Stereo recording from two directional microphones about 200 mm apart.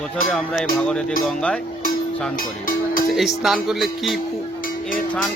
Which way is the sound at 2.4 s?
45° left (ahead or behind).